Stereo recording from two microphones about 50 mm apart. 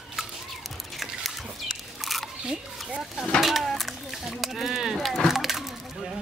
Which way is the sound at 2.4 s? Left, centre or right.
Right.